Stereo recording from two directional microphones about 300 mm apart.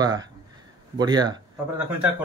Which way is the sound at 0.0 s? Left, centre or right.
Centre.